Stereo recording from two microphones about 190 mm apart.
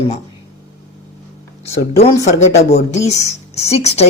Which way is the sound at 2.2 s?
35° left (ahead or behind).